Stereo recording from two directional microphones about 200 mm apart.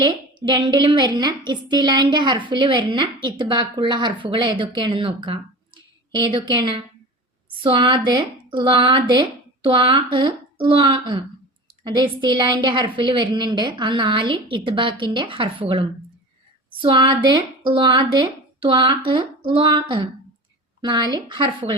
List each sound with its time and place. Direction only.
0.0 s a woman's voice: 20° right (ahead or behind)